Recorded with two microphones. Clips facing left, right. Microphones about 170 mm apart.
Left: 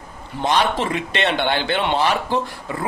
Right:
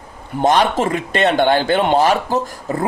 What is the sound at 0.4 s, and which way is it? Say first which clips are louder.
Speech: right 5 dB; 45° right (ahead or behind).